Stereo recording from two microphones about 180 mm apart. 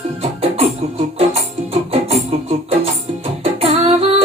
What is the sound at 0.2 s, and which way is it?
Music, 35° right (ahead or behind).